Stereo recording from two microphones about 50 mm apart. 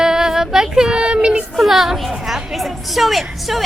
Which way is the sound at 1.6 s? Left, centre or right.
Centre.